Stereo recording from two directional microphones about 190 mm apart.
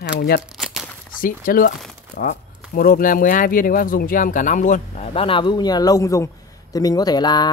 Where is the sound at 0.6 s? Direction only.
Centre (ahead or behind).